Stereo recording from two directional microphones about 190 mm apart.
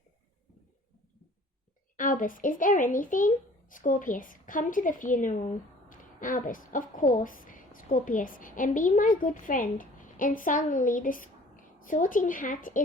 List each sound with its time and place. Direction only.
2.0 s a woman's voice: 45° left (ahead or behind)